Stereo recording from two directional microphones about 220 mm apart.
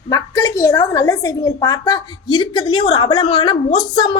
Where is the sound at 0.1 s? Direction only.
15° left (ahead or behind).